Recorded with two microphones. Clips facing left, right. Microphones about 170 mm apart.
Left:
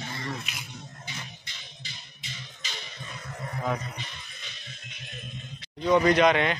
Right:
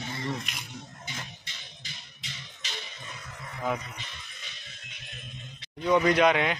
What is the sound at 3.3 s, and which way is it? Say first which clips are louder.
Music: left 10 dB; 40° left (ahead or behind).